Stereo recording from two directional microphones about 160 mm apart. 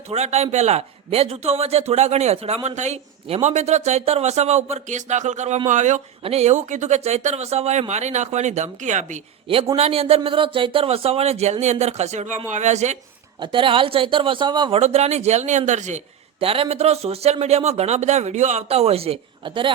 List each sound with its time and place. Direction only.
0.1 s a man's voice: 45° right (ahead or behind)
9.7 s a man's voice: 40° right (ahead or behind)
13.4 s a man's voice: 30° right (ahead or behind)
14.8 s a man's voice: 45° right (ahead or behind)